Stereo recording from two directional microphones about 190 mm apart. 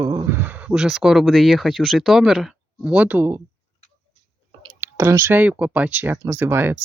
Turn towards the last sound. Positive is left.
turn(degrees=-10)  # may be behind; listen again after turning